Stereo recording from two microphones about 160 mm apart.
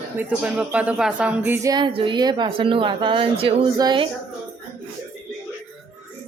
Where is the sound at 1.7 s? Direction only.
30° right (ahead or behind).